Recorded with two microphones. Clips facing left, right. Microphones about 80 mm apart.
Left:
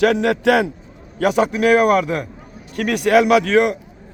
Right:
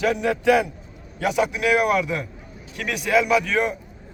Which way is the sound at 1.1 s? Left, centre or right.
Left.